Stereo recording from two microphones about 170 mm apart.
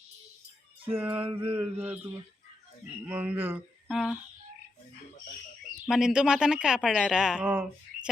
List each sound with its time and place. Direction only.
0.9 s mantra: 10° right (ahead or behind)
3.8 s speech: centre (ahead or behind)
5.9 s speech: 5° right (ahead or behind)